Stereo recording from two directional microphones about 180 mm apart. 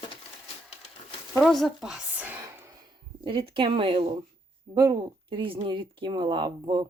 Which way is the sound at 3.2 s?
30° right (ahead or behind).